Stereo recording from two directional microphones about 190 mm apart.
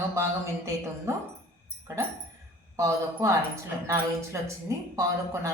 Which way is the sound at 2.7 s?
15° right (ahead or behind).